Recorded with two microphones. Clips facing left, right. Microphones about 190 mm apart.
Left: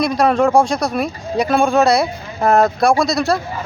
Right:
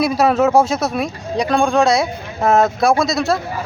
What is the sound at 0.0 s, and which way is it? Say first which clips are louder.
A man's voice: even; 5° right (ahead or behind).